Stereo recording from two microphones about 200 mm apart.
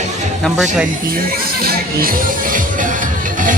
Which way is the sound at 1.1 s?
45° right (ahead or behind).